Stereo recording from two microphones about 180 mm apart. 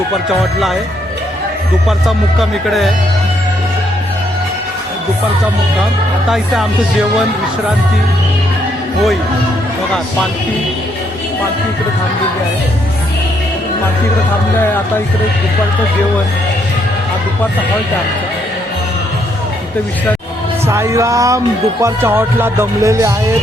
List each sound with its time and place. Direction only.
0.3 s speech: centre (ahead or behind)
1.9 s speech: centre (ahead or behind)
6.3 s speech: centre (ahead or behind)
20.7 s speech: 15° right (ahead or behind)